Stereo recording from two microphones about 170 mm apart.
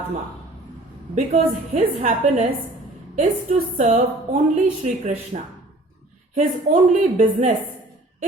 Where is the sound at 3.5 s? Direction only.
40° right (ahead or behind).